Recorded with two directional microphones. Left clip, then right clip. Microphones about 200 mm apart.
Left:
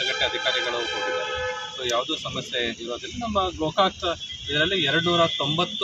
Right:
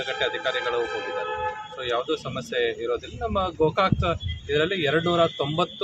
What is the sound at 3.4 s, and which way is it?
A man's voice, 20° right (ahead or behind).